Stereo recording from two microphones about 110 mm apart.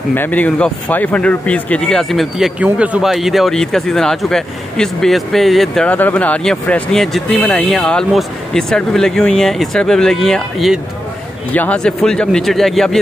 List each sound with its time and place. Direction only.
0.1 s speech: 15° left (ahead or behind)
5.9 s speech: 15° left (ahead or behind)
7.3 s speech: 15° left (ahead or behind)
11.5 s speech: 10° left (ahead or behind)